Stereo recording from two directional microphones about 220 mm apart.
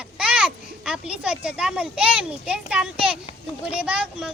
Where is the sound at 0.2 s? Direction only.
5° right (ahead or behind).